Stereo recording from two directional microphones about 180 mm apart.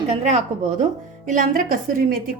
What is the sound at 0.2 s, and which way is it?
Speech, 40° right (ahead or behind).